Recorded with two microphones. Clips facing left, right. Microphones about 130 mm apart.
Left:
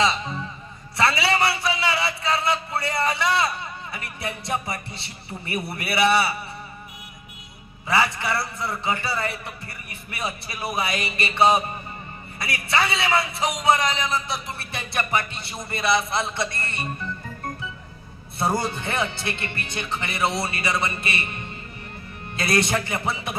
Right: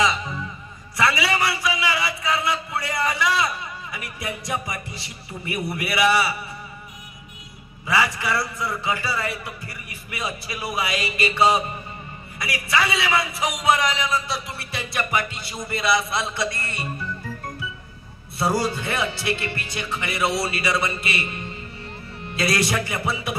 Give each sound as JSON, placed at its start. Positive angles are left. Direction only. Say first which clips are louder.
{"t": 0.0, "sound": "music", "louder": "even", "side_deg": 25}
{"t": 0.9, "sound": "a sound", "louder": "even", "side_deg": 25}
{"t": 5.5, "sound": "a man's voice", "louder": "right 1 dB", "side_deg": 25}
{"t": 7.8, "sound": "a man's voice", "louder": "even", "side_deg": 25}
{"t": 18.4, "sound": "a man's voice", "louder": "right 2 dB", "side_deg": 20}
{"t": 22.3, "sound": "a man's voice", "louder": "even", "side_deg": 25}